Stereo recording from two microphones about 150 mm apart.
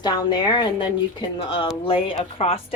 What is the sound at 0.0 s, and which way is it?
A woman's voice, 25° left (ahead or behind).